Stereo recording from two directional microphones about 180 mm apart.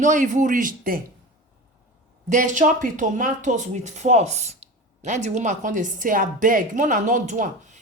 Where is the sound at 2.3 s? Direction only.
45° right (ahead or behind).